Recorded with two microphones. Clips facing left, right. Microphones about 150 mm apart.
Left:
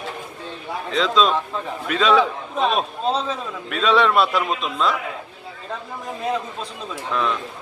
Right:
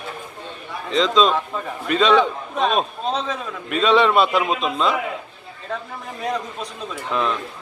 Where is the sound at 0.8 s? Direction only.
Centre (ahead or behind).